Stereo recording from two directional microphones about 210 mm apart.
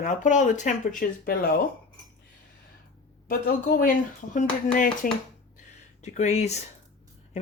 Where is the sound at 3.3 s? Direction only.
45° left (ahead or behind).